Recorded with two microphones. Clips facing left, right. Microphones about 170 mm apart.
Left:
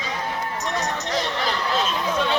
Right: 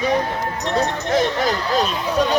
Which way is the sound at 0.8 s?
50° right (ahead or behind).